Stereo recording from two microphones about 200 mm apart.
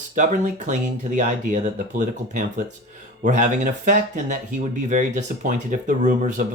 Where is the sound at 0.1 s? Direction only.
35° right (ahead or behind).